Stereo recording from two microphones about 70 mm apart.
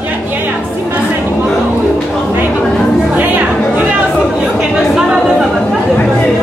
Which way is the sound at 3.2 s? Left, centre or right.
Right.